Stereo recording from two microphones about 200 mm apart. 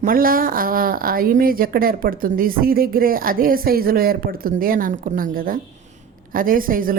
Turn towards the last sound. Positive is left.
turn(degrees=-45)  # may be behind; listen again after turning